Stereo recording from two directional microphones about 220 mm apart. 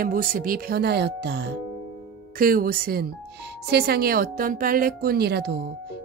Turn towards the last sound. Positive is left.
turn(degrees=-50)  # may be behind; listen again after turning